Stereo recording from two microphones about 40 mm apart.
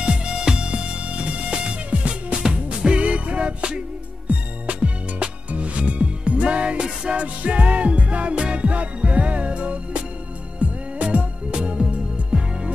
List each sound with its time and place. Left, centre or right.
0.0 s music: right
7.2 s music: right